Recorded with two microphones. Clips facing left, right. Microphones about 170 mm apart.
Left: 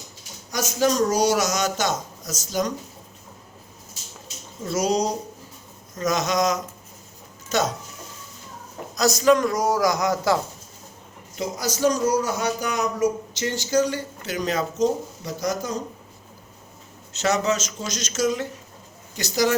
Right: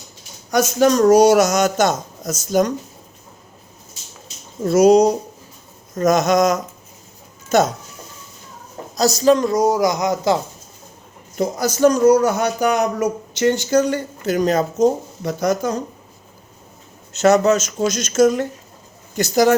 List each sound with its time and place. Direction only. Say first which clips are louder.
0.5 s speech: right 7 dB; 65° right (ahead or behind)
4.6 s speech: right 11 dB; 55° right (ahead or behind)
9.0 s a man's voice: right 3 dB; 30° right (ahead or behind)
11.3 s speech: right 8 dB; 55° right (ahead or behind)
17.1 s speech: right 9 dB; 50° right (ahead or behind)